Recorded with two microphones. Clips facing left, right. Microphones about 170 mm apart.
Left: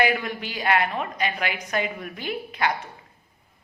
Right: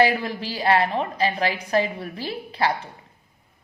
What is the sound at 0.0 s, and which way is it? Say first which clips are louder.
A woman's voice: right 3 dB; 30° right (ahead or behind).